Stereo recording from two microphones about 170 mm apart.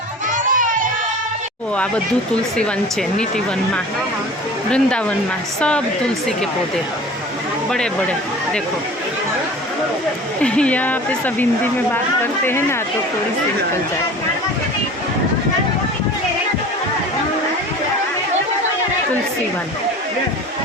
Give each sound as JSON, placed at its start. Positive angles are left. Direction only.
{"t": 0.3, "sound": "music", "side_deg": -50}
{"t": 4.7, "sound": "speech", "side_deg": 5}
{"t": 7.7, "sound": "speech", "side_deg": 5}
{"t": 10.4, "sound": "speech", "side_deg": 5}